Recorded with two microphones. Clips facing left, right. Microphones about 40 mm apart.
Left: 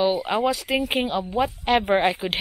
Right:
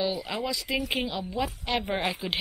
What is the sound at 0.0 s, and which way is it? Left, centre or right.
A woman's voice, left.